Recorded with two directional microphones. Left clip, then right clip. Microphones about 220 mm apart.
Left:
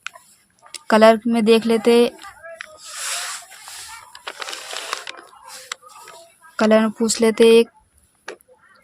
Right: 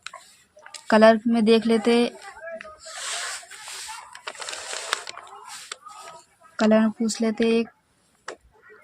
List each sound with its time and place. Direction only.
0.7 s speech: 30° left (ahead or behind)
4.2 s a sound: 25° left (ahead or behind)
6.6 s speech: 40° left (ahead or behind)